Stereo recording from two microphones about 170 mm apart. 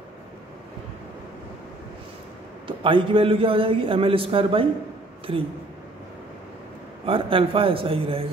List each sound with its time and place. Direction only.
2.6 s a man's voice: 30° right (ahead or behind)
7.1 s a man's voice: 30° right (ahead or behind)